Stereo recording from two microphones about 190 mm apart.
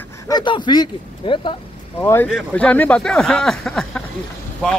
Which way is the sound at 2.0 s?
10° left (ahead or behind).